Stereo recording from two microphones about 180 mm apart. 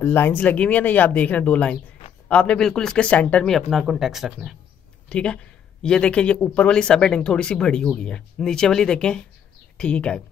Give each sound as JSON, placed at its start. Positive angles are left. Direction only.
{"t": 0.0, "sound": "speech", "side_deg": 10}